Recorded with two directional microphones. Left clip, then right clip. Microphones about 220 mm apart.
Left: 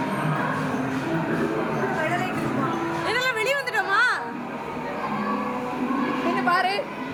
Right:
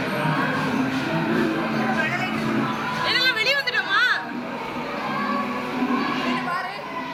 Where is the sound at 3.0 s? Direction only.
20° left (ahead or behind).